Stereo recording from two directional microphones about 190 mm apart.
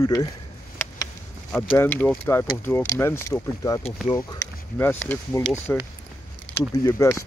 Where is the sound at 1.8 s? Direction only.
10° left (ahead or behind).